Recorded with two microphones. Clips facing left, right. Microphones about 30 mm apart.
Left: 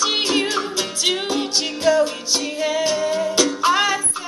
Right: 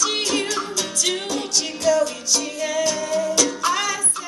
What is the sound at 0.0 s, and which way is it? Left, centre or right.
Music, left.